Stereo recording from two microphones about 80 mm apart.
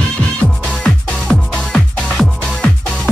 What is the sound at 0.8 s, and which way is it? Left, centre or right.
Music, centre.